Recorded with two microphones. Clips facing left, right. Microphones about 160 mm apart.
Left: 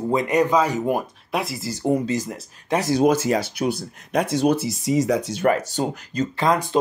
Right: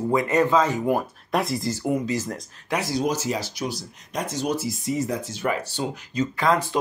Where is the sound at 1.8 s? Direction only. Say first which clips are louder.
Left 6 dB; 30° left (ahead or behind).